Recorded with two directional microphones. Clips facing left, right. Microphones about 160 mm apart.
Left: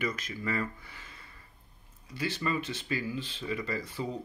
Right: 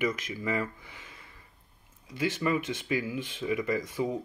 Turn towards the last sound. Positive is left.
turn(degrees=-15)  # may be behind; listen again after turning